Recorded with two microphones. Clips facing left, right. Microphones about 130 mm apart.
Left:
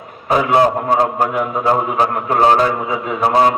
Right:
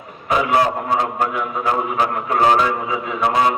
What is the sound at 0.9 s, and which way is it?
A man's voice, 35° left (ahead or behind).